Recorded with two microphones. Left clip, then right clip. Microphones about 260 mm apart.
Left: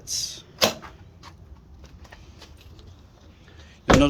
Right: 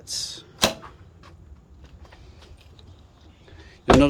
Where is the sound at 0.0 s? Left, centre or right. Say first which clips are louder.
Left 1 dB; centre.